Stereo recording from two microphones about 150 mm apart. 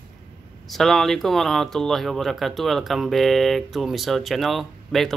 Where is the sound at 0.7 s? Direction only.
Centre (ahead or behind).